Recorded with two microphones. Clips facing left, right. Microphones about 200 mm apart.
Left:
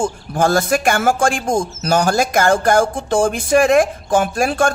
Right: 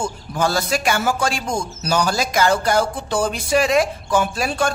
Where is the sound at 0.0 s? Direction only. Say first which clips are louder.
Left 4 dB; 50° left (ahead or behind).